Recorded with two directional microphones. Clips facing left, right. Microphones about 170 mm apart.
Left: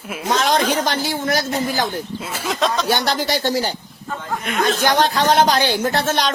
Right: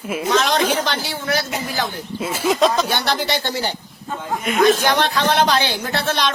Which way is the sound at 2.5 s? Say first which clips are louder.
Right 4 dB; 5° right (ahead or behind).